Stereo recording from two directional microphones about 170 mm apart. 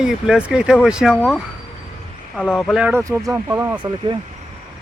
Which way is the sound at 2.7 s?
10° right (ahead or behind).